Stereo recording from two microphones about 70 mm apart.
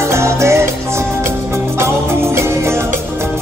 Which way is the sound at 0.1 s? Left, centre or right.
Right.